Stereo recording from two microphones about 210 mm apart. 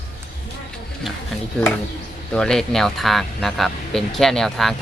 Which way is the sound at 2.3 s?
5° left (ahead or behind).